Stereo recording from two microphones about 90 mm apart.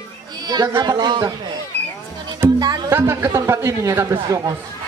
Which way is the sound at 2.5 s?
50° right (ahead or behind).